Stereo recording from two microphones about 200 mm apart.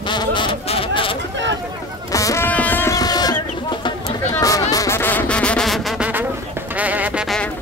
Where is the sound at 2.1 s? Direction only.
15° left (ahead or behind); by 7.4 s centre (ahead or behind).